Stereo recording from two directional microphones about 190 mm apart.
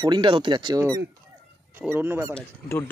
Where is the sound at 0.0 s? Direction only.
25° right (ahead or behind).